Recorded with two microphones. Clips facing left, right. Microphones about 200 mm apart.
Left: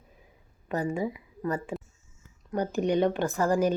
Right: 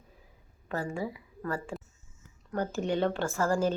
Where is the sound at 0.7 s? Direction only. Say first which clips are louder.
Left 4 dB; 20° left (ahead or behind).